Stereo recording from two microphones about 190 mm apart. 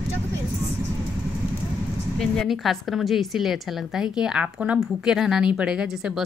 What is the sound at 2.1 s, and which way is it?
A woman's voice, centre (ahead or behind).